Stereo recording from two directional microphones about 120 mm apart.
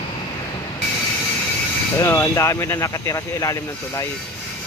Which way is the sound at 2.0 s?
25° left (ahead or behind).